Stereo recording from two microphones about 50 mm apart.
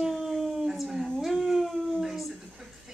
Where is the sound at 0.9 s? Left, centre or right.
Centre.